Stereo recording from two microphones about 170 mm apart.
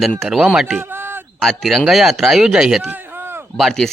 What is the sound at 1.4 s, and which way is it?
Speech, centre (ahead or behind).